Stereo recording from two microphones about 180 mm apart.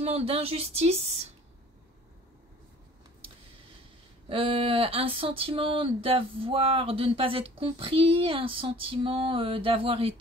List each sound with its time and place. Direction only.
0.0 s speech: 35° right (ahead or behind)
4.3 s speech: 30° right (ahead or behind)